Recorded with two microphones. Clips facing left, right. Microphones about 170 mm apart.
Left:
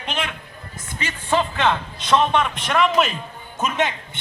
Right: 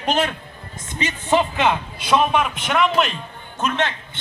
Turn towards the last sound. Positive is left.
turn(degrees=15)  # may be behind; listen again after turning